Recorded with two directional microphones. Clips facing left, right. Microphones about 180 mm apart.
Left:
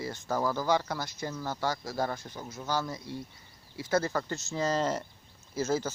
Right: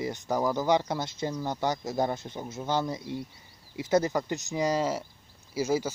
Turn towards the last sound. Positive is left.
turn(degrees=-10)  # may be behind; listen again after turning